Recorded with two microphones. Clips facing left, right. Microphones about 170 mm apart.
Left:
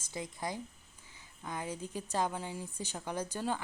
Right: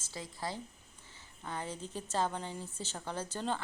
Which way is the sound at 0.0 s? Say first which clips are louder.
Left 2 dB; 20° left (ahead or behind).